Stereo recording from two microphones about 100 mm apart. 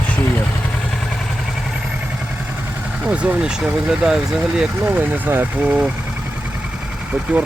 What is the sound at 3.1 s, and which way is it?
Speech, 15° right (ahead or behind).